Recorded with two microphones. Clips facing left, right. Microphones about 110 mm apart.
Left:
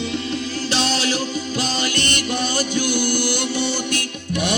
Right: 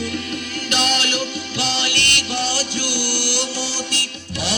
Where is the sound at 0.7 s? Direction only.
35° left (ahead or behind).